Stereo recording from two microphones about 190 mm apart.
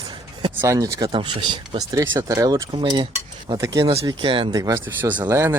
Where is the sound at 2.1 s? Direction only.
15° right (ahead or behind).